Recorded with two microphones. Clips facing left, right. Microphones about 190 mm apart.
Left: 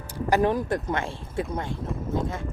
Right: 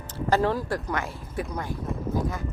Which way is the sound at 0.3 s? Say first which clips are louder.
Left 2 dB; 15° left (ahead or behind).